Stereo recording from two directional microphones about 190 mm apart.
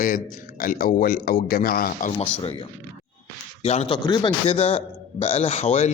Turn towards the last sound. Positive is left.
turn(degrees=35)  # may be behind; listen again after turning